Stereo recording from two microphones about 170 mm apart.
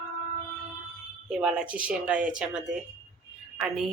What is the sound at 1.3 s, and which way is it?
Speech, 5° right (ahead or behind).